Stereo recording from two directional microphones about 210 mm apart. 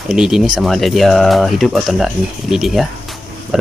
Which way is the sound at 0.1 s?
Centre (ahead or behind).